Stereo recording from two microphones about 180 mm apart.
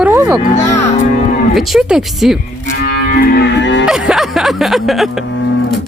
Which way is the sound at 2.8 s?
55° left (ahead or behind).